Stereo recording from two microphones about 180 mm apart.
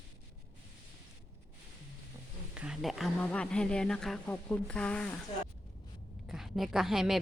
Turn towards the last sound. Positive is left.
turn(degrees=0)  # may be behind; listen again after turning